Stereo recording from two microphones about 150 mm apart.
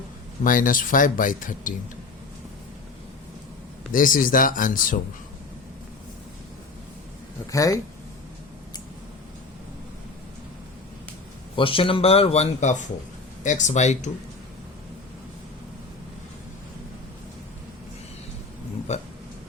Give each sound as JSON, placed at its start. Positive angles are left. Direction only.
{"t": 0.4, "sound": "speech", "side_deg": 65}
{"t": 3.9, "sound": "speech", "side_deg": 65}
{"t": 7.5, "sound": "speech", "side_deg": 20}
{"t": 11.5, "sound": "speech", "side_deg": 35}
{"t": 18.9, "sound": "a sound", "side_deg": 45}